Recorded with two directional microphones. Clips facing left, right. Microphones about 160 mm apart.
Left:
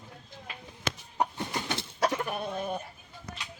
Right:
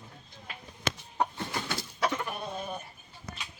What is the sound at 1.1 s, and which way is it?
Chicken, 15° left (ahead or behind).